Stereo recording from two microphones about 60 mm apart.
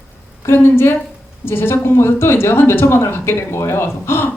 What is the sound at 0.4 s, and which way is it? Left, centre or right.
Speech, left.